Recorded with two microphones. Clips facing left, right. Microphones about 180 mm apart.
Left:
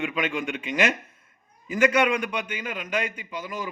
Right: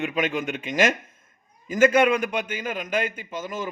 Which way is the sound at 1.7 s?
40° right (ahead or behind).